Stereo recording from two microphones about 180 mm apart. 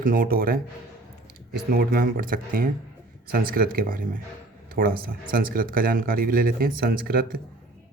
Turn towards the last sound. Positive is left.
turn(degrees=-55)  # may be behind; listen again after turning